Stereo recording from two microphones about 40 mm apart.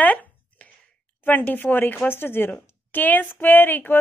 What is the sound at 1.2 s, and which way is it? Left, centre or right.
Speech, left.